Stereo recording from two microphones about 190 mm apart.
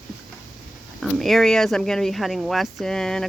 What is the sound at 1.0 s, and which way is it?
Speech, centre (ahead or behind).